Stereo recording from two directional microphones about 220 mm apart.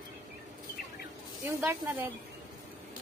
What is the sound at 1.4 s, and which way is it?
Speech, 10° right (ahead or behind).